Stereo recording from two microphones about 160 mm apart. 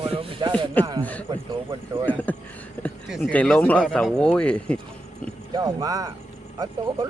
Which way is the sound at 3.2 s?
10° left (ahead or behind).